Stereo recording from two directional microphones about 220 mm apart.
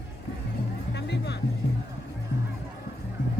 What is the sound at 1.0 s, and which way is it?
Music, 50° left (ahead or behind).